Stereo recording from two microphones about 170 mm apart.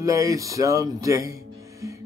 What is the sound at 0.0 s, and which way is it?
Speech, 20° right (ahead or behind).